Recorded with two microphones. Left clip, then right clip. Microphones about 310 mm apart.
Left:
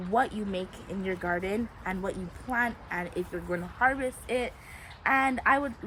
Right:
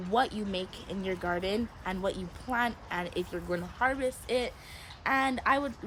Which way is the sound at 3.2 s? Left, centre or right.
Centre.